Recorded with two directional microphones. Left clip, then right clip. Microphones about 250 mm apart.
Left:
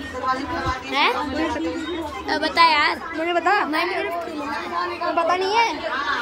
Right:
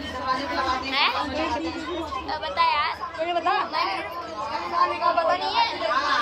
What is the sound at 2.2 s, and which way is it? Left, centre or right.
Chatter, left.